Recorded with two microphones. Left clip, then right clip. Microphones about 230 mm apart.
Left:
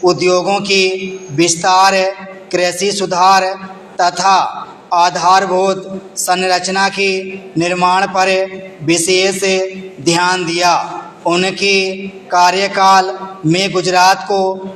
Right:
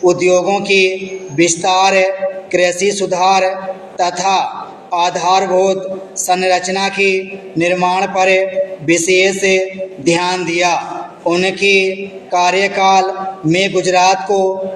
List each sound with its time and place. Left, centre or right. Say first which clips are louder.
0.0 s a man's voice: right 1 dB; left